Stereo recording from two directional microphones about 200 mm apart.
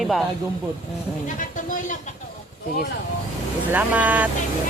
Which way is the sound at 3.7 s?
10° right (ahead or behind).